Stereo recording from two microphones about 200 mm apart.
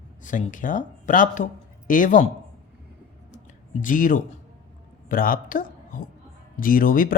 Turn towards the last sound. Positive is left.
turn(degrees=45)  # may be behind; listen again after turning